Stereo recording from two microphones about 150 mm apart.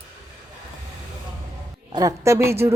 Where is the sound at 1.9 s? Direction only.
20° right (ahead or behind).